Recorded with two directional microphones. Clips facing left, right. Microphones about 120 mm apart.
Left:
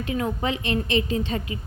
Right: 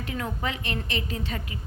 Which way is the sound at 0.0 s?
20° left (ahead or behind).